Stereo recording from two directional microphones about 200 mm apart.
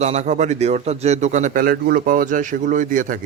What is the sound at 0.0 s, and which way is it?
A man's voice, 35° right (ahead or behind).